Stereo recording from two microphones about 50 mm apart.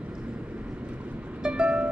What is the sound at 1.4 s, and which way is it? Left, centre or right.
Music, centre.